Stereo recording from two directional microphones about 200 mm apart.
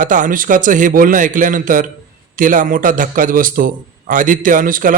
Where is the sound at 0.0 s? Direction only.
40° right (ahead or behind).